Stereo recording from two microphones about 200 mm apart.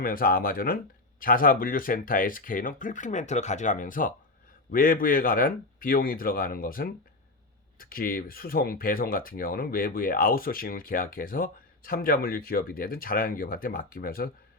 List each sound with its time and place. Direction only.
0.0 s speech: 45° left (ahead or behind)